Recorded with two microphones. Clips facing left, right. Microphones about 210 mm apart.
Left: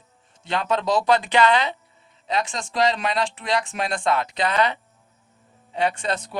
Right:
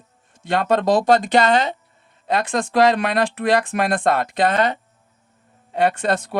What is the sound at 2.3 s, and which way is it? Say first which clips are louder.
Speech: right 5 dB; 55° right (ahead or behind).